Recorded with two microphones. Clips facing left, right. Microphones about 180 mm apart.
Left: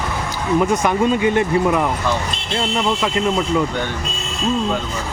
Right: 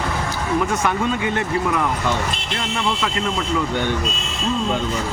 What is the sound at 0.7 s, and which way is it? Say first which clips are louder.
Speech: left 4 dB; 15° left (ahead or behind).